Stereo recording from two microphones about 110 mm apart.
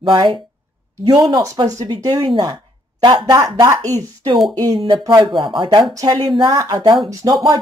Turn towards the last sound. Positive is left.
turn(degrees=-30)  # may be behind; listen again after turning